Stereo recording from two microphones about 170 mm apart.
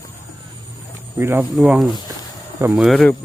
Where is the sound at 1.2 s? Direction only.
10° right (ahead or behind); by 3.1 s 5° left (ahead or behind).